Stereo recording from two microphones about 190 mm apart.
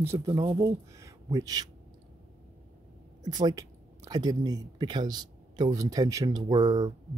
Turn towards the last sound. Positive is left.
turn(degrees=-20)  # may be behind; listen again after turning